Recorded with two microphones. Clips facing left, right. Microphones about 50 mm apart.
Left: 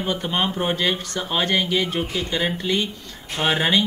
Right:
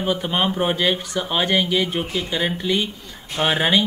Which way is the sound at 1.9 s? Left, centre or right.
Centre.